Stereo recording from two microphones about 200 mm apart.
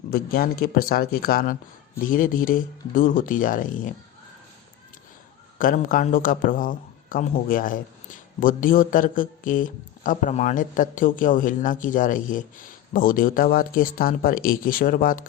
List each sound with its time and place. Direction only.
0.6 s a man's voice: 45° left (ahead or behind)
5.5 s a man's voice: 45° left (ahead or behind)